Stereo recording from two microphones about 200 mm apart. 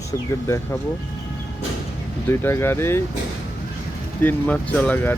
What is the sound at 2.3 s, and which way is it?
Speech, 10° left (ahead or behind).